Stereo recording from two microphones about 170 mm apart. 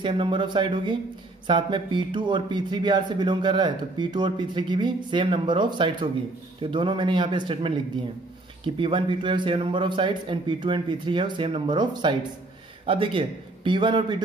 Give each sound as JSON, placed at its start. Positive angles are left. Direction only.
{"t": 0.0, "sound": "a man's voice", "side_deg": -30}